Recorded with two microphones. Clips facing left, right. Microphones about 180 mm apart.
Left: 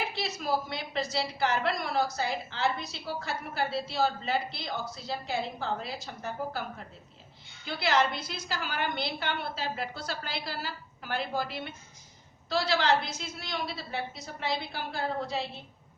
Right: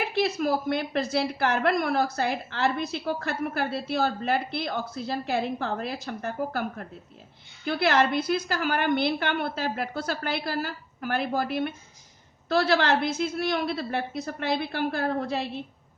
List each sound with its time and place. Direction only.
0.2 s a woman's voice: 55° right (ahead or behind)